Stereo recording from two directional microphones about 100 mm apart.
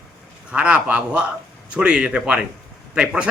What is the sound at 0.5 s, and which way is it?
A man's voice, 15° right (ahead or behind).